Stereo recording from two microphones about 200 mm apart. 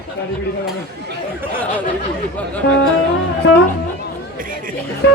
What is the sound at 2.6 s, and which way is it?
Music, 55° left (ahead or behind).